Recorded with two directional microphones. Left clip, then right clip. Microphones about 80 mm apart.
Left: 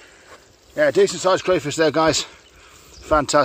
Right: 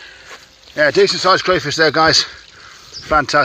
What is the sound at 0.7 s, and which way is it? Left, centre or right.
Speech, left.